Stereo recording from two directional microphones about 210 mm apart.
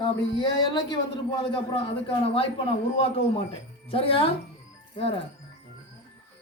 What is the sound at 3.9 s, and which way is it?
Speech, 25° left (ahead or behind).